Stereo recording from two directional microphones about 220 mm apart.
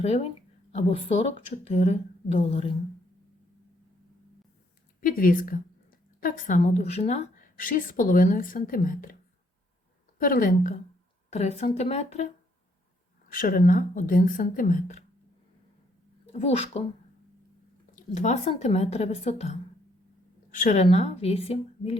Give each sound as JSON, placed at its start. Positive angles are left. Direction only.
{"t": 0.0, "sound": "speech", "side_deg": 30}
{"t": 4.9, "sound": "a woman's voice", "side_deg": 40}
{"t": 10.2, "sound": "a woman's voice", "side_deg": 40}
{"t": 13.3, "sound": "a woman's voice", "side_deg": 40}
{"t": 16.2, "sound": "speech", "side_deg": 30}
{"t": 17.9, "sound": "a woman's voice", "side_deg": 30}